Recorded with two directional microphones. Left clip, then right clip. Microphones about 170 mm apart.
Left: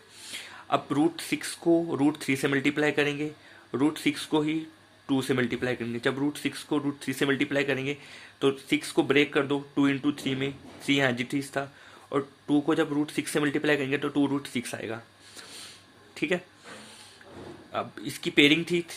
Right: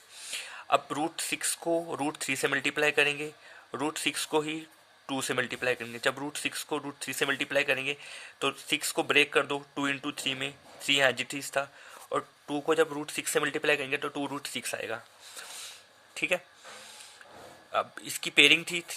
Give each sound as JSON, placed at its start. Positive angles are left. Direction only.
{"t": 0.3, "sound": "speech", "side_deg": -35}
{"t": 17.7, "sound": "speech", "side_deg": -35}